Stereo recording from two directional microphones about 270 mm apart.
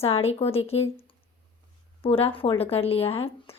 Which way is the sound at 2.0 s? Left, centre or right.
Left.